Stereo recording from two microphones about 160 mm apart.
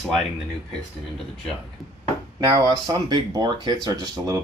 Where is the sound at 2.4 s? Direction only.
30° right (ahead or behind).